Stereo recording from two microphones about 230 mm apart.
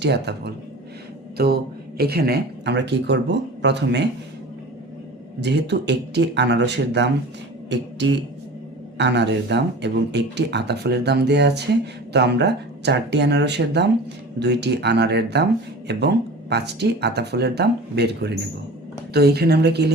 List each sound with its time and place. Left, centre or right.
0.0 s speech: right
5.4 s speech: right